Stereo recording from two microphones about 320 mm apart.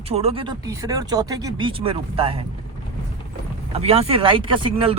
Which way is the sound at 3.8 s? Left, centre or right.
Centre.